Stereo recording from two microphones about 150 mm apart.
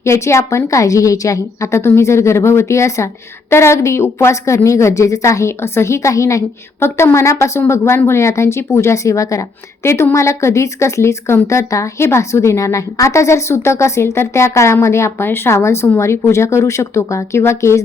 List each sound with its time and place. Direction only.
0.0 s a woman's voice: 20° left (ahead or behind)